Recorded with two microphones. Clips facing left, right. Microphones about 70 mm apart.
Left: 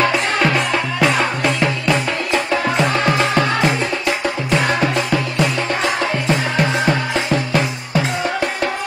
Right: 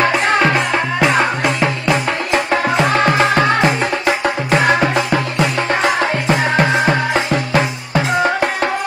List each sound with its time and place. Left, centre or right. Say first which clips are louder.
1.4 s music: right 1 dB; centre
2.3 s music: right 2 dB; right
4.7 s music: right 2 dB; right
5.7 s music: right 3 dB; right